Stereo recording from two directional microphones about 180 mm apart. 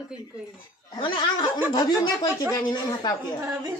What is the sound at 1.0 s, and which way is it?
Speech, 25° left (ahead or behind).